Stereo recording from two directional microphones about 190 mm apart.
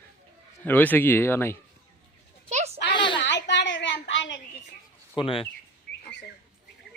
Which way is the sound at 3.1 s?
70° left (ahead or behind).